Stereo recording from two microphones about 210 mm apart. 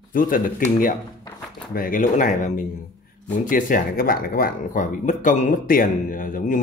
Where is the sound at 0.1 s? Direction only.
40° left (ahead or behind).